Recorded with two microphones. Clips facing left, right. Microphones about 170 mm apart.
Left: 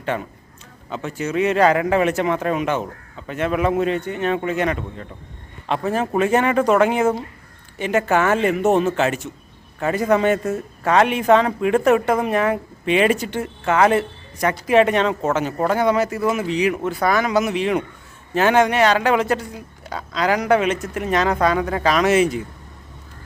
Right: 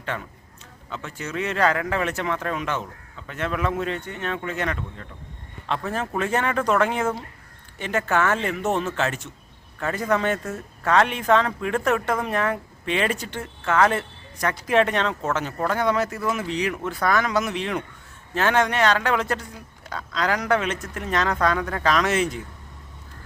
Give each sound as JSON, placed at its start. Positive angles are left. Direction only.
{"t": 0.0, "sound": "a man's voice", "side_deg": 15}